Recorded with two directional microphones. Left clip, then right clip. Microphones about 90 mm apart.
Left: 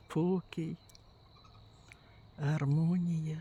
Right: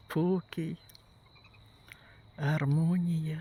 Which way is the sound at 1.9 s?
15° right (ahead or behind).